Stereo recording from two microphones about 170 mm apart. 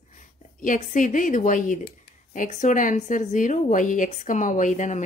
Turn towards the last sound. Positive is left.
turn(degrees=45)  # may be behind; listen again after turning